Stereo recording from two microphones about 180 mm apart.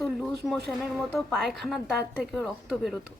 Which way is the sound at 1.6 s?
Centre (ahead or behind).